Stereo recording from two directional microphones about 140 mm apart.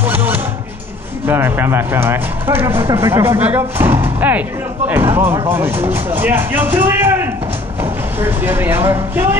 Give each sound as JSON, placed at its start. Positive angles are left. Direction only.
{"t": 0.0, "sound": "a sound", "side_deg": -15}
{"t": 1.2, "sound": "speech", "side_deg": -15}
{"t": 8.2, "sound": "speech", "side_deg": -15}